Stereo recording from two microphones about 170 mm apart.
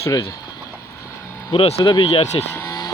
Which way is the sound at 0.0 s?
20° left (ahead or behind).